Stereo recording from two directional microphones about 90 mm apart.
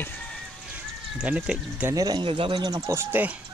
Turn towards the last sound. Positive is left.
turn(degrees=-35)  # may be behind; listen again after turning